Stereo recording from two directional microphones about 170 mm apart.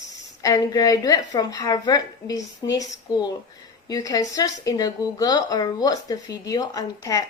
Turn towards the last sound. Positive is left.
turn(degrees=20)  # may be behind; listen again after turning